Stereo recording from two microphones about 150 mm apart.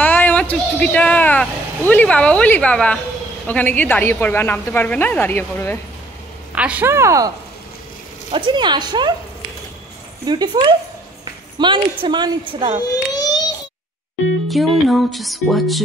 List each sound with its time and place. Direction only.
0.0 s a woman's voice: 10° left (ahead or behind)
6.5 s a woman's voice: 10° right (ahead or behind)
8.3 s a woman's voice: 30° right (ahead or behind)
10.2 s a woman's voice: 30° right (ahead or behind)
12.8 s a sound: 25° left (ahead or behind)
14.5 s speech: centre (ahead or behind)